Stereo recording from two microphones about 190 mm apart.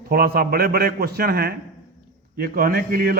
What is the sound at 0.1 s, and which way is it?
A man's voice, 50° right (ahead or behind).